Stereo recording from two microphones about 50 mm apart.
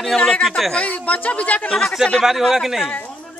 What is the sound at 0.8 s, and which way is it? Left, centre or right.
Speech, left.